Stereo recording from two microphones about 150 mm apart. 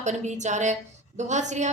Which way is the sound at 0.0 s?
50° right (ahead or behind).